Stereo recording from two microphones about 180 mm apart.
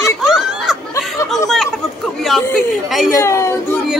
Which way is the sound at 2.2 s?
Centre (ahead or behind).